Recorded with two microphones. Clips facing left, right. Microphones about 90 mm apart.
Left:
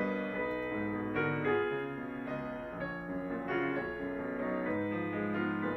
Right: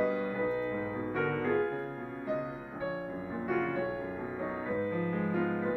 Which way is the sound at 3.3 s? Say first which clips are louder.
Right 2 dB; 5° right (ahead or behind).